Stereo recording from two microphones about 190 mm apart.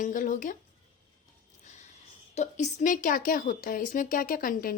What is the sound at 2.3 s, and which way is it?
A woman's voice, 35° left (ahead or behind).